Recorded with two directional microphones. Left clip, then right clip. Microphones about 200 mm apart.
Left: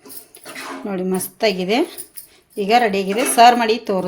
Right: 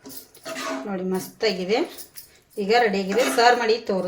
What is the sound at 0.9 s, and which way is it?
Speech, 50° left (ahead or behind).